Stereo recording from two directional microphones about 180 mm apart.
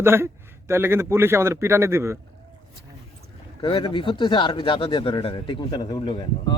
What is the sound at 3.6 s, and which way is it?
Speech, 25° left (ahead or behind).